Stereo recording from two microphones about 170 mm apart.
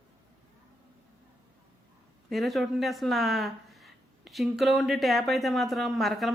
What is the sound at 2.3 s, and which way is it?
Speech, centre (ahead or behind).